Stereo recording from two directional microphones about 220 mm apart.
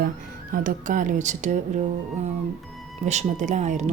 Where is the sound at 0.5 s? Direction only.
35° right (ahead or behind).